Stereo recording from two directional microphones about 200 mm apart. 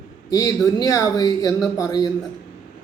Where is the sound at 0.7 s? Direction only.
15° left (ahead or behind).